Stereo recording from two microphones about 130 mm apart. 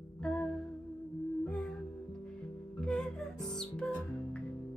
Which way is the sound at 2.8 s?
5° left (ahead or behind).